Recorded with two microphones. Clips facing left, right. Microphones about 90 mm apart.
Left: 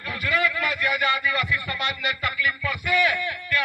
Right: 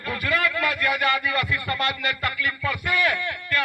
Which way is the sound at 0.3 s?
45° right (ahead or behind).